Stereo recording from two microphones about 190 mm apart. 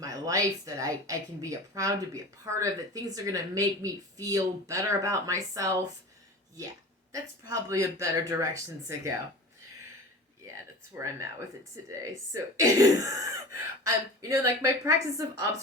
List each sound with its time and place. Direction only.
0.0 s a woman's voice: 15° right (ahead or behind)
7.1 s a woman's voice: 15° right (ahead or behind)
10.9 s a woman's voice: 15° right (ahead or behind)